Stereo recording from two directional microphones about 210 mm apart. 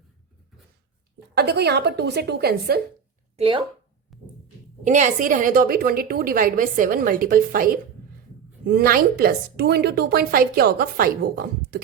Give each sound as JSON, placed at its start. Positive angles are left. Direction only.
{"t": 1.4, "sound": "a woman's voice", "side_deg": -50}
{"t": 3.3, "sound": "speech", "side_deg": -25}
{"t": 4.1, "sound": "music", "side_deg": 0}
{"t": 4.9, "sound": "a woman's voice", "side_deg": -35}